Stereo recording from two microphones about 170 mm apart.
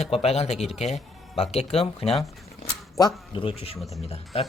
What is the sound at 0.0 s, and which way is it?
Speech, 35° left (ahead or behind).